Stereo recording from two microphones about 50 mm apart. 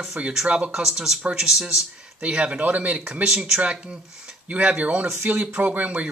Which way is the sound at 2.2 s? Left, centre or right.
Right.